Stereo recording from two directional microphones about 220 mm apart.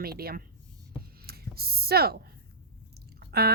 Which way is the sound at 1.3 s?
45° right (ahead or behind).